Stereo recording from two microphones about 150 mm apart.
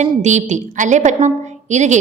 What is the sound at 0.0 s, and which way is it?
A woman's voice, 50° right (ahead or behind).